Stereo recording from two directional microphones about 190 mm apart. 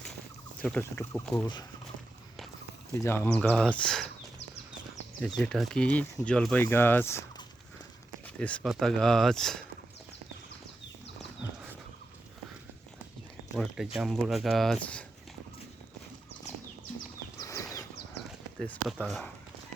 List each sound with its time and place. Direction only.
0.6 s speech: 10° left (ahead or behind)
2.9 s speech: 15° left (ahead or behind)
5.4 s speech: centre (ahead or behind)
13.6 s speech: centre (ahead or behind)
17.4 s bird: 20° left (ahead or behind)
18.6 s speech: 5° left (ahead or behind)